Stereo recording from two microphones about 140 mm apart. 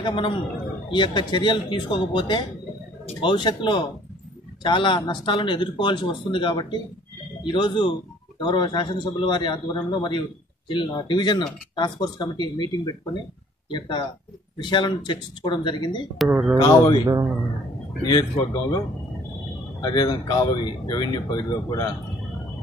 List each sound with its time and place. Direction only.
0.0 s speech: 35° left (ahead or behind)
16.3 s speech: 5° right (ahead or behind)
16.6 s speech: 30° left (ahead or behind)
18.0 s speech: 30° left (ahead or behind)
19.8 s speech: 30° left (ahead or behind)